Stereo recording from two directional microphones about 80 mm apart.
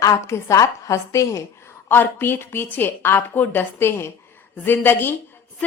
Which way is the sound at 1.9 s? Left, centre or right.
Left.